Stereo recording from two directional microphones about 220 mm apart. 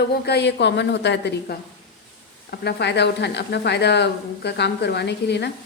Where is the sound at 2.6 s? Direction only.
50° left (ahead or behind).